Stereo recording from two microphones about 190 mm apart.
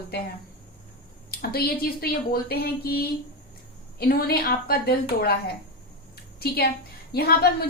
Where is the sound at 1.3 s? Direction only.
55° left (ahead or behind).